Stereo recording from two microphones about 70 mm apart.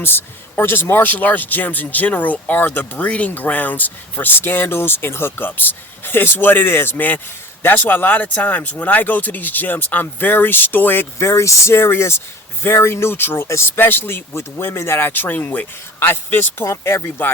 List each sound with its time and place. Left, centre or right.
0.0 s speech: left
11.2 s speech: left